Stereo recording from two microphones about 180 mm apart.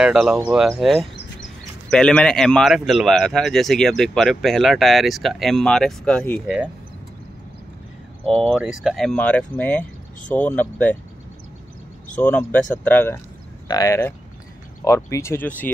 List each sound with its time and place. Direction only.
0.0 s speech: 5° right (ahead or behind)
6.4 s speech: 5° right (ahead or behind)
8.4 s speech: centre (ahead or behind)
12.2 s speech: 10° left (ahead or behind)